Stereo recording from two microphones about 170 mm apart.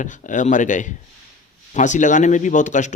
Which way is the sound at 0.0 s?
50° left (ahead or behind).